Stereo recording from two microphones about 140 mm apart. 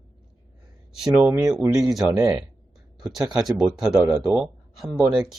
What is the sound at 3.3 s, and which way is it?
Speech, centre (ahead or behind).